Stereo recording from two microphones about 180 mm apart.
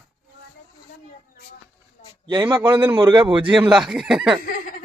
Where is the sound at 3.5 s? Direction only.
5° right (ahead or behind).